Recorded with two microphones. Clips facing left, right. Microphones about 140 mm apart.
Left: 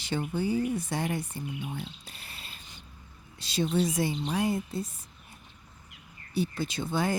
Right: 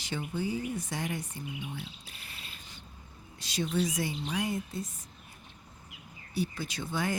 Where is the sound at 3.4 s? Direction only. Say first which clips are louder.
Left 3 dB; 30° left (ahead or behind).